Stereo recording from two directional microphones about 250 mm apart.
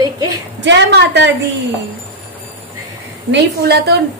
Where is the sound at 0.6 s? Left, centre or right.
Right.